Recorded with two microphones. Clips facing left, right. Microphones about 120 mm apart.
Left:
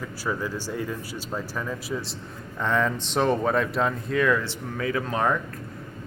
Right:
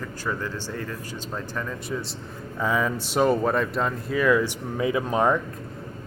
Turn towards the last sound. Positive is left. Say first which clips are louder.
# right 3 dB
turn(degrees=-20)  # may be behind; listen again after turning